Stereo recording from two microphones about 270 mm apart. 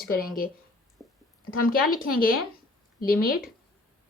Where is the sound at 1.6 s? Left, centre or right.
Left.